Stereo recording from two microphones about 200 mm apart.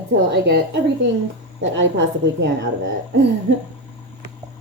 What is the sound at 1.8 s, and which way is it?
Speech, 65° right (ahead or behind).